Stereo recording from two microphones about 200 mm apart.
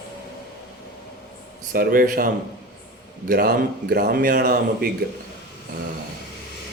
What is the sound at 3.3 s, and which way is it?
Speech, 50° right (ahead or behind).